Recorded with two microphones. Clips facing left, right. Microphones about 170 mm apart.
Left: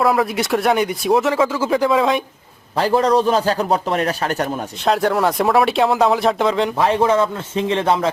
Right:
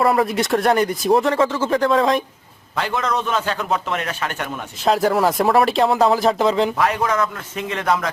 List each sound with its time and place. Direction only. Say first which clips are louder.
0.0 s speech: even; centre (ahead or behind)
2.7 s a man's voice: left 7 dB; 35° left (ahead or behind)
4.9 s speech: even; centre (ahead or behind)
6.7 s speech: left 4 dB; 30° left (ahead or behind)